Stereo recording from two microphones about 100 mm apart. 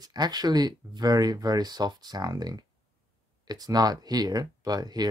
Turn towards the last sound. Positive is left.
turn(degrees=-40)  # may be behind; listen again after turning